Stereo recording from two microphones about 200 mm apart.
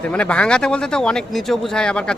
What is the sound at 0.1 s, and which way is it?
A man's voice, 5° left (ahead or behind).